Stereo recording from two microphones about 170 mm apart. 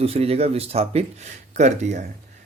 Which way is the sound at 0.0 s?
35° right (ahead or behind).